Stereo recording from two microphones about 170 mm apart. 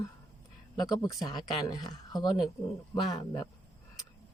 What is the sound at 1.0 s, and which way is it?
Speech, 20° left (ahead or behind).